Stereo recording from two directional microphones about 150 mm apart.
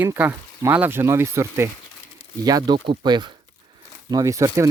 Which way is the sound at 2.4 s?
25° right (ahead or behind).